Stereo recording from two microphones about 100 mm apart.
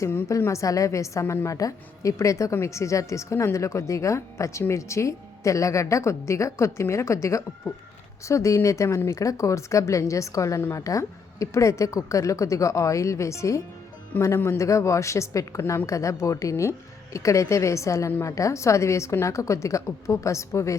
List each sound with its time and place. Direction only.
0.0 s a woman's voice: 25° left (ahead or behind)